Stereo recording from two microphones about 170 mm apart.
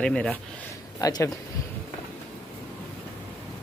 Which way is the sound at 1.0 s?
20° left (ahead or behind).